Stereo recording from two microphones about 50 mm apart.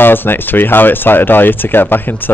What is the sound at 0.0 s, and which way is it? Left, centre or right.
Speech, left.